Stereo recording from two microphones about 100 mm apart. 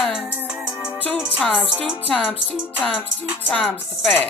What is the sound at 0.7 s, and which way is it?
Music, 15° right (ahead or behind).